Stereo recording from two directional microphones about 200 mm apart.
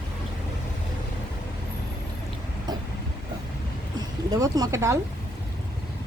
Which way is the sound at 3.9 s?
20° right (ahead or behind).